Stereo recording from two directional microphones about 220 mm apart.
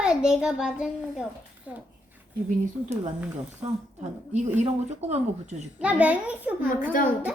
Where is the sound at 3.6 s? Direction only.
30° right (ahead or behind).